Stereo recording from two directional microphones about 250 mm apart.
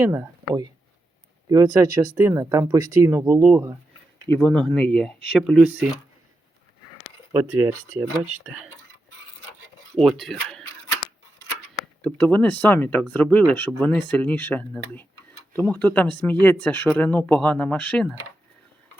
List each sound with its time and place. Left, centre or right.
0.0 s speech: centre
4.3 s speech: centre
7.3 s speech: centre
9.9 s speech: centre
12.0 s speech: centre